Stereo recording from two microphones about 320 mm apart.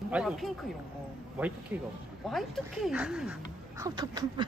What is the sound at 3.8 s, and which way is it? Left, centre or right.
Duck, centre.